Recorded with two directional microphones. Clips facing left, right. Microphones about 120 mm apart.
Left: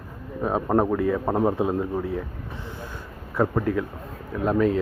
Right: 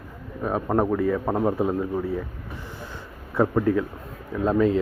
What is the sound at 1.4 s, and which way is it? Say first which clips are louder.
Speech: left 1 dB; 20° left (ahead or behind).